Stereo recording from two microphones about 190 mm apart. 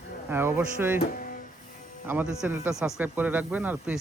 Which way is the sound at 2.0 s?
10° right (ahead or behind).